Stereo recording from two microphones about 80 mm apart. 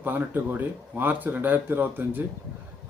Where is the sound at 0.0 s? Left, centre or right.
Right.